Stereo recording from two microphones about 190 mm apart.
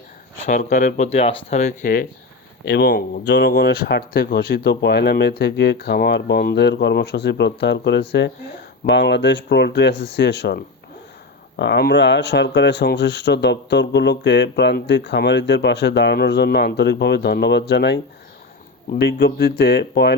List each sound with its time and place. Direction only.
0.4 s speech: 40° left (ahead or behind)
2.6 s speech: 60° left (ahead or behind)